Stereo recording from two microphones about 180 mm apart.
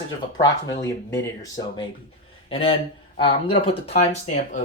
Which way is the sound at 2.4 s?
30° left (ahead or behind).